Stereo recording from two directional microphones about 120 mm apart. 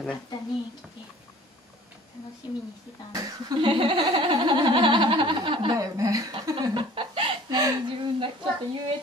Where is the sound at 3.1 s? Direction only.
30° right (ahead or behind).